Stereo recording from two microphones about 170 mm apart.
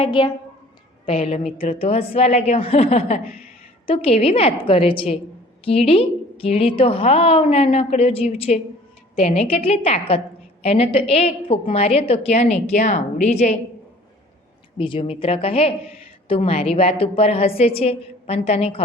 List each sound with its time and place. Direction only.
0.0 s a woman's voice: 30° left (ahead or behind); by 13.5 s 45° left (ahead or behind)
14.8 s a woman's voice: 30° left (ahead or behind)